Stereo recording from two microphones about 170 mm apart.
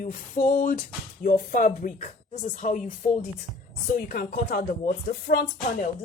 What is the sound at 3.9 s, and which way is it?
Speech, 60° left (ahead or behind).